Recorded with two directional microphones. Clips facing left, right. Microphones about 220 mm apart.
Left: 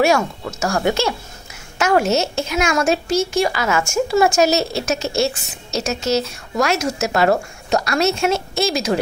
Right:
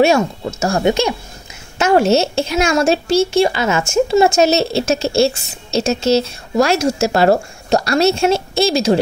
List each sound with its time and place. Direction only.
0.0 s a woman's voice: 25° right (ahead or behind)